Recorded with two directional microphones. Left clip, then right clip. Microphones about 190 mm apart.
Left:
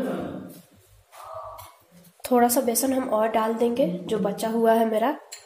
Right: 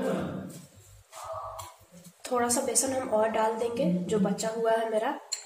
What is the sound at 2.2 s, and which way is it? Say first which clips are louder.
A woman's voice: left 7 dB; 50° left (ahead or behind).